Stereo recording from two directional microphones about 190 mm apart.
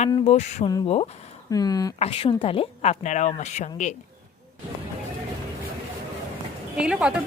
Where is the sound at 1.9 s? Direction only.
30° left (ahead or behind).